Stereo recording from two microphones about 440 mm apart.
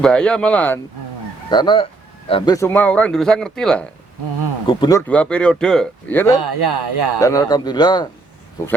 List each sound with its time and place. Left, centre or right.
0.0 s speech: centre
6.4 s speech: right
7.2 s a man's voice: centre